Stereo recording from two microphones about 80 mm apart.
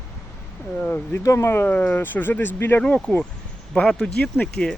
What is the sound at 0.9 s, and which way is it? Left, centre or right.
Speech, left.